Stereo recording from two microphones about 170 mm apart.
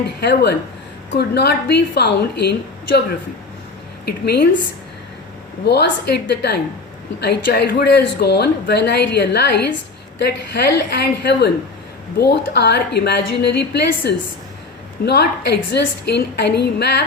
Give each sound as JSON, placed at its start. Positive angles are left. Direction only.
{"t": 0.2, "sound": "speech", "side_deg": 75}
{"t": 4.0, "sound": "speech", "side_deg": 70}
{"t": 5.6, "sound": "a woman's voice", "side_deg": 75}